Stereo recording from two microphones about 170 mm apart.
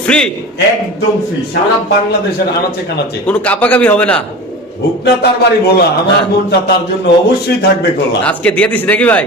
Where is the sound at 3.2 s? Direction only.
10° left (ahead or behind).